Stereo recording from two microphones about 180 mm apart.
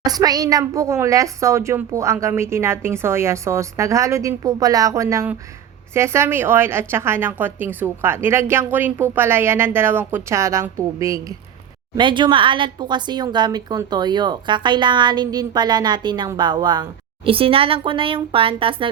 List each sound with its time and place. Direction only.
0.0 s a woman's voice: 20° right (ahead or behind)